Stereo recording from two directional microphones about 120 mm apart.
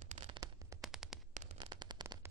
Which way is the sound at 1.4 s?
70° right (ahead or behind).